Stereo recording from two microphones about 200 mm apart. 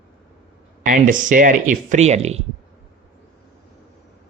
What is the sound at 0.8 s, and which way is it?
Speech, 40° right (ahead or behind).